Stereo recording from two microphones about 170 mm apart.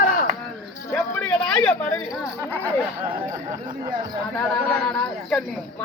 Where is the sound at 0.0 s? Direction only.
55° left (ahead or behind).